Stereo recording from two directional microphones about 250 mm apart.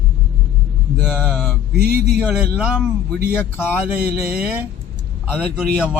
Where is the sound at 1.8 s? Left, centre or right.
Right.